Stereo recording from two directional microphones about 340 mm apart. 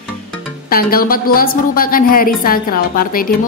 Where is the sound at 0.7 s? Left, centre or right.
Left.